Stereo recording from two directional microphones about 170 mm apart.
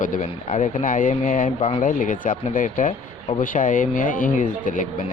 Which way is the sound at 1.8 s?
50° left (ahead or behind).